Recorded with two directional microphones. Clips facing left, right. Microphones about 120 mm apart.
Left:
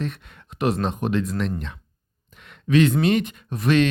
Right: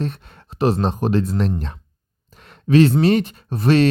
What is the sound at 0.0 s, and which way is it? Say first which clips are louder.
Speech: right 3 dB; 35° right (ahead or behind).